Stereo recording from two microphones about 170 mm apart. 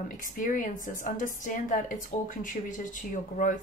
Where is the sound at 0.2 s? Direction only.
50° left (ahead or behind).